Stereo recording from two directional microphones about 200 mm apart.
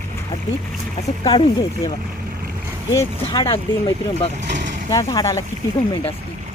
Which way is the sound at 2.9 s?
15° left (ahead or behind).